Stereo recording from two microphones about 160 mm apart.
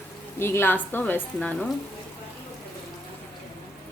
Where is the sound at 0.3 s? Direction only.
15° left (ahead or behind).